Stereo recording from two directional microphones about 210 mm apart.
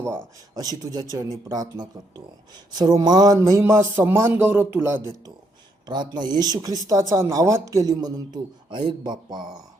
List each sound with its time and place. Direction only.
0.5 s speech: 20° right (ahead or behind)